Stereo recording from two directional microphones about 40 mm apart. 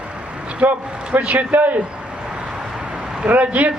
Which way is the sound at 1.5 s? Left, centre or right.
Right.